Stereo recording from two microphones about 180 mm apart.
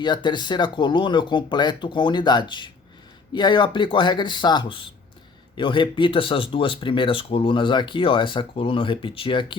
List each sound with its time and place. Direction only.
0.0 s speech: 25° left (ahead or behind)